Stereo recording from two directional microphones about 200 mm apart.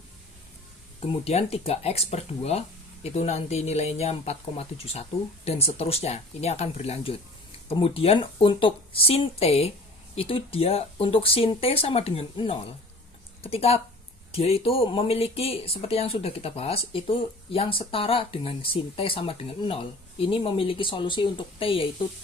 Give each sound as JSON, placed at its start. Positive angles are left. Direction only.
{"t": 0.9, "sound": "speech", "side_deg": 30}